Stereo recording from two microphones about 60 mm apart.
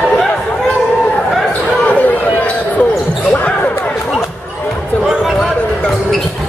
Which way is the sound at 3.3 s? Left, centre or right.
Left.